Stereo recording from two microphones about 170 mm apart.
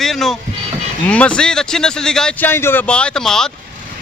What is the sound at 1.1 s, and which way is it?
Speech, 5° left (ahead or behind).